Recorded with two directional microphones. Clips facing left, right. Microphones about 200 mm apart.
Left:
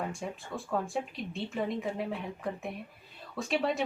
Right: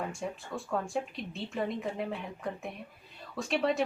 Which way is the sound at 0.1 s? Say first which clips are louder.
Right 1 dB; centre (ahead or behind).